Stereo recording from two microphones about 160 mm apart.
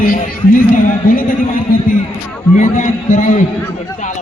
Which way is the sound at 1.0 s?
65° left (ahead or behind).